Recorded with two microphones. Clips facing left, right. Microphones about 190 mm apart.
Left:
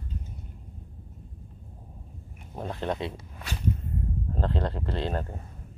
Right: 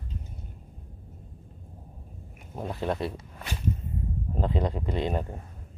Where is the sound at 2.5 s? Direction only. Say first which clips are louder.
Right 1 dB; 5° right (ahead or behind).